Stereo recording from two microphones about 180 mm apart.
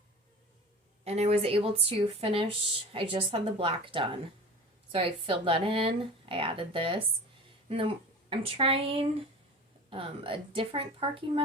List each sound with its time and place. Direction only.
1.0 s speech: 35° right (ahead or behind)